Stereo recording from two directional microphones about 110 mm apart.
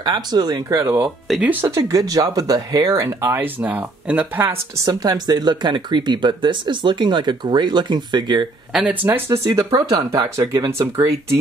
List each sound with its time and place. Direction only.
0.0 s speech: 40° right (ahead or behind)
1.0 s speech: 10° right (ahead or behind)
1.8 s speech: 30° right (ahead or behind); by 4.6 s 15° right (ahead or behind)
4.8 s speech: 35° right (ahead or behind)
8.7 s speech: 10° right (ahead or behind)
9.6 s speech: 35° right (ahead or behind)
10.3 s speech: 30° right (ahead or behind)